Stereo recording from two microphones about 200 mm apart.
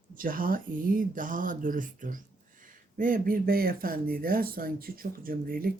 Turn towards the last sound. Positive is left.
turn(degrees=-45)  # may be behind; listen again after turning